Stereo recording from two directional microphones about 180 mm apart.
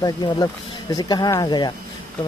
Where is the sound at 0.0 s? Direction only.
20° left (ahead or behind).